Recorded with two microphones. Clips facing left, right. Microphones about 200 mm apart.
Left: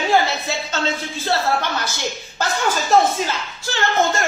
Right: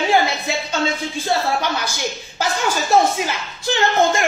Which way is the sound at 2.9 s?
15° right (ahead or behind).